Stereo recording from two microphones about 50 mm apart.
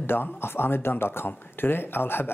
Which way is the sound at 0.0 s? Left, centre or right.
Left.